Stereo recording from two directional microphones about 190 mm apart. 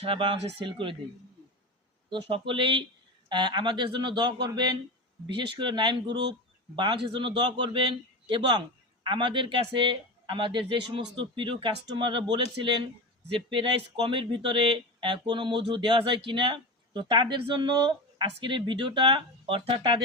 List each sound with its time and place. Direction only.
0.0 s speech: 25° right (ahead or behind)
2.0 s speech: 25° right (ahead or behind)